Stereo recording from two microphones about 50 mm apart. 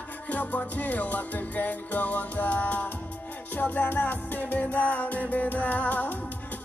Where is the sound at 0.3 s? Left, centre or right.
Left.